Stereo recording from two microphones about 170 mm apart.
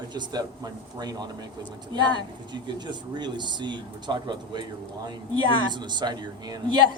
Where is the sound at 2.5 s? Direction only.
25° right (ahead or behind).